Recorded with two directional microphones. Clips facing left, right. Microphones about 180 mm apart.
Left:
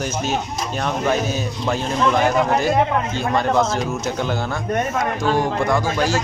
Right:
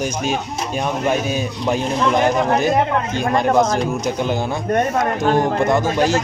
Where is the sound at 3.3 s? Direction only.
15° right (ahead or behind).